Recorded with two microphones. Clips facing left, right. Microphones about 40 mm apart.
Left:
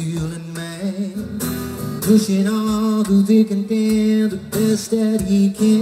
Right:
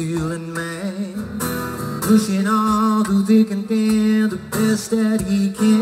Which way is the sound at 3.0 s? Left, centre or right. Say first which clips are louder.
Left 1 dB; right.